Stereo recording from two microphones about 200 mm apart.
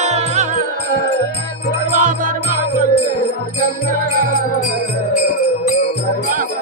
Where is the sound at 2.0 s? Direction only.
40° right (ahead or behind).